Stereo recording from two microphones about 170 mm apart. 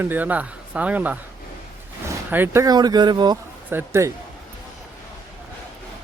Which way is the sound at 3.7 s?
15° right (ahead or behind).